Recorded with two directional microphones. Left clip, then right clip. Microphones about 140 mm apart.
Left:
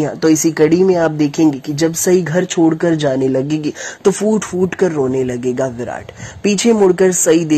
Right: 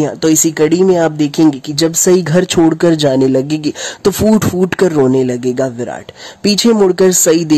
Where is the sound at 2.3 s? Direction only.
45° right (ahead or behind).